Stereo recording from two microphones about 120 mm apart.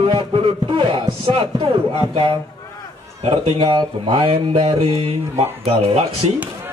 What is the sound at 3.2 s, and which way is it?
Speech, 45° right (ahead or behind).